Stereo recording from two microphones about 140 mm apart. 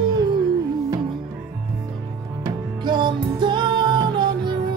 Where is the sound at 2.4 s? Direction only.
35° right (ahead or behind).